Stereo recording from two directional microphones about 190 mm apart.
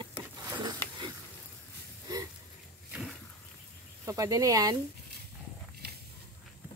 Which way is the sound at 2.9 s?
5° right (ahead or behind).